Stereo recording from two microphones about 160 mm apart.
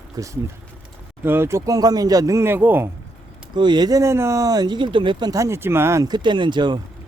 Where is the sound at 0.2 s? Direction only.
25° right (ahead or behind).